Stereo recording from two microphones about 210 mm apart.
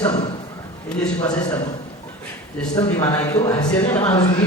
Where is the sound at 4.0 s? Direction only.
30° left (ahead or behind).